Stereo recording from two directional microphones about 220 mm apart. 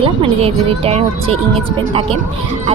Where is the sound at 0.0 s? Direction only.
25° right (ahead or behind).